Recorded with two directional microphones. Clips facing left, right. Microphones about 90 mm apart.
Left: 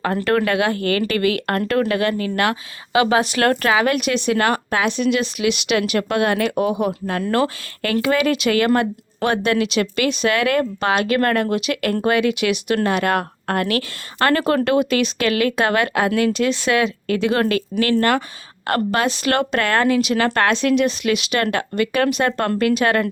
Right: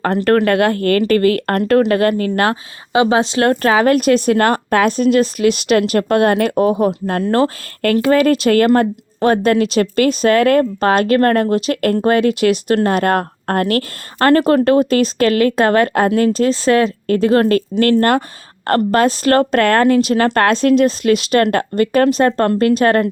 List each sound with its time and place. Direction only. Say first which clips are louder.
0.3 s speech: right 5 dB; 50° right (ahead or behind); by 7.5 s 30° right (ahead or behind)
7.8 s speech: right 6 dB; 45° right (ahead or behind)